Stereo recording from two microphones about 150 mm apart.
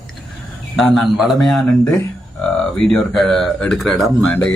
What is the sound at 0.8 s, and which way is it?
Speech, centre (ahead or behind).